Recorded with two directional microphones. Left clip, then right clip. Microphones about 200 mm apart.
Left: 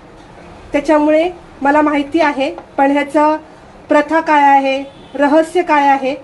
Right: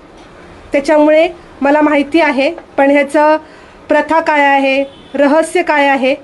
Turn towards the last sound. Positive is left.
turn(degrees=-35)  # may be behind; listen again after turning